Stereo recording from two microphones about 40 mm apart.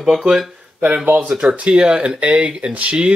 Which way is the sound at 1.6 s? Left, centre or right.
Centre.